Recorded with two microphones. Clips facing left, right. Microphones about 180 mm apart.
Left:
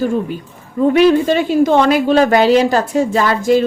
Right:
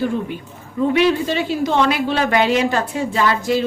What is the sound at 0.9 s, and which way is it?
A woman's voice, 45° left (ahead or behind).